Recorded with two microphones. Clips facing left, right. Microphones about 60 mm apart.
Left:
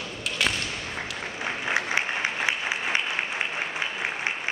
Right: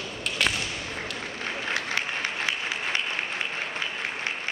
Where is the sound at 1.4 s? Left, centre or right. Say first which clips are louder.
Left 3 dB; centre.